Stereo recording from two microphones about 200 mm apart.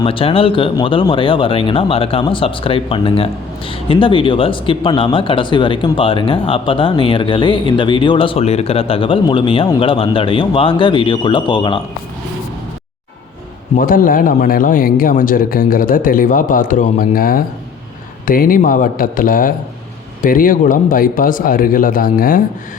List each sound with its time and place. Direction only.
0.0 s speech: 25° left (ahead or behind)
13.7 s speech: 45° left (ahead or behind)